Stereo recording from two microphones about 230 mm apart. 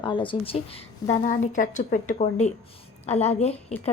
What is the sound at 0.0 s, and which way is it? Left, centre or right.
A woman's voice, left.